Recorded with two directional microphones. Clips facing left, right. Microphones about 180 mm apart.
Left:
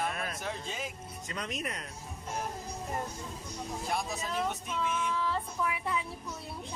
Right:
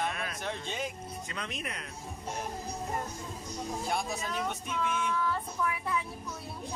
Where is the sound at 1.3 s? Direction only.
40° left (ahead or behind).